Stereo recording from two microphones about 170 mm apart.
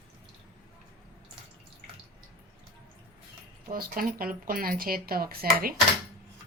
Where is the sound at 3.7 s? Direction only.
60° right (ahead or behind).